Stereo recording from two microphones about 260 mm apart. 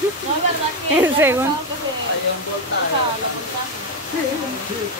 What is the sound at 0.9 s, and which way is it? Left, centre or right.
Speech, centre.